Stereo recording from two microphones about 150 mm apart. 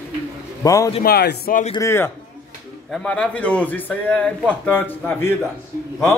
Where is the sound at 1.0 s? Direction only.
90° left.